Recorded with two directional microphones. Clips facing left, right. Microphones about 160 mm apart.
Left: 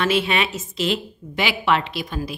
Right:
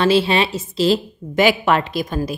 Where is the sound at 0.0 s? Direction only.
30° right (ahead or behind).